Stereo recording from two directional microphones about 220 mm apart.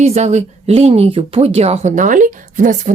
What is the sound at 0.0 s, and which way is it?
A woman's voice, 30° right (ahead or behind).